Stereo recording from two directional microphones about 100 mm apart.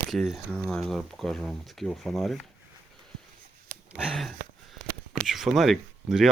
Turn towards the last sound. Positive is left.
turn(degrees=-5)  # may be behind; listen again after turning